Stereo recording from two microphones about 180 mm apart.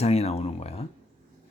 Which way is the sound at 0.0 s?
35° left (ahead or behind).